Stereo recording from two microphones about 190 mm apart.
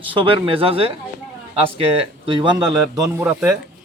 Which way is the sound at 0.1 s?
25° right (ahead or behind).